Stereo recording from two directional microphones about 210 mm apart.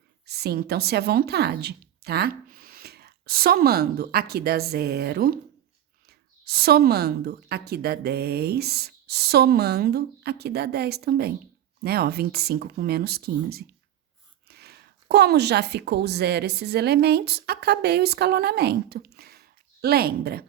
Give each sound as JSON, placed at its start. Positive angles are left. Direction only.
{"t": 0.3, "sound": "a woman's voice", "side_deg": -50}